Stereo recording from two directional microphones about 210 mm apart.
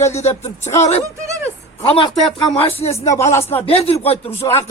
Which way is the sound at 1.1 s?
15° right (ahead or behind).